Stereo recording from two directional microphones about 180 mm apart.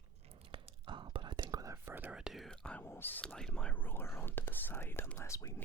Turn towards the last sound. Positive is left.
turn(degrees=20)  # may be behind; listen again after turning